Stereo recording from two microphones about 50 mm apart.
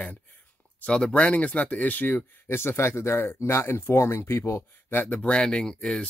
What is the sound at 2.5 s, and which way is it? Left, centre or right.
Speech, left.